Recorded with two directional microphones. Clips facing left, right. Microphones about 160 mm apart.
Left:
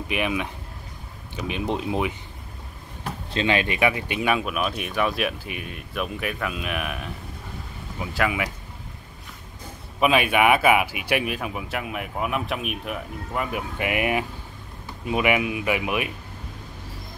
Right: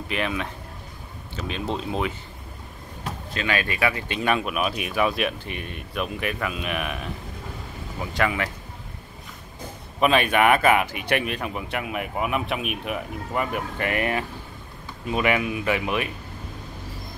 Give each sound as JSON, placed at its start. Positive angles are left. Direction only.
{"t": 0.1, "sound": "speech", "side_deg": 15}
{"t": 3.3, "sound": "speech", "side_deg": 25}
{"t": 4.3, "sound": "speech", "side_deg": 0}
{"t": 8.1, "sound": "speech", "side_deg": 5}
{"t": 9.9, "sound": "speech", "side_deg": 5}